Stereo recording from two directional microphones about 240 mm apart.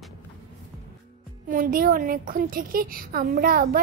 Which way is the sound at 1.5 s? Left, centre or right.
Right.